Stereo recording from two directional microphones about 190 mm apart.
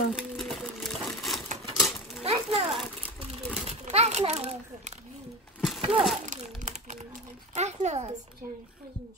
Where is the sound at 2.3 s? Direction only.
30° right (ahead or behind).